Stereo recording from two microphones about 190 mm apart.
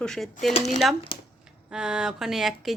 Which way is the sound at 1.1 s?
30° left (ahead or behind).